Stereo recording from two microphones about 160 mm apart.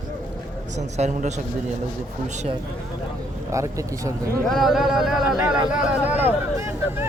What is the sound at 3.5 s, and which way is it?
Speech, 20° right (ahead or behind).